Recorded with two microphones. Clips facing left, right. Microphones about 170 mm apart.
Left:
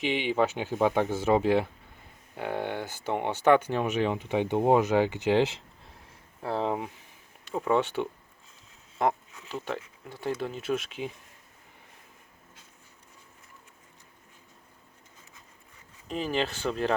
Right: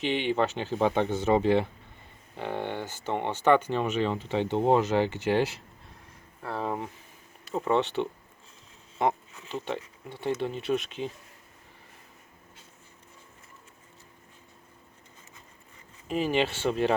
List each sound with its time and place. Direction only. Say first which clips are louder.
0.0 s speech: even; 10° left (ahead or behind)
7.5 s speech: even; 5° left (ahead or behind)
16.0 s speech: right 3 dB; 5° right (ahead or behind)